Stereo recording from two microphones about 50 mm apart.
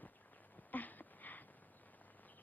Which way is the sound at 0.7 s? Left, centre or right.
Left.